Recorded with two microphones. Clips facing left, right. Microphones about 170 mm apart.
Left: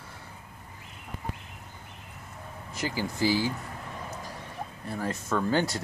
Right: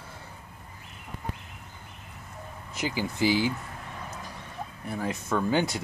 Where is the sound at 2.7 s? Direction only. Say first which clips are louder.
Right 1 dB; 20° right (ahead or behind).